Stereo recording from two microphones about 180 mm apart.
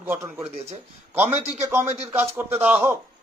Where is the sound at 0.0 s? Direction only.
10° right (ahead or behind).